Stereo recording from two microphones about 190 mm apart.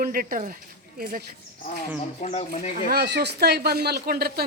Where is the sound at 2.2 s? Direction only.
35° left (ahead or behind).